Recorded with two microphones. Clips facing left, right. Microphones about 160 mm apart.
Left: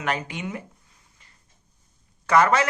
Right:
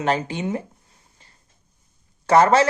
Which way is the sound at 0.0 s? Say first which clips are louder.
Right 6 dB; 30° right (ahead or behind).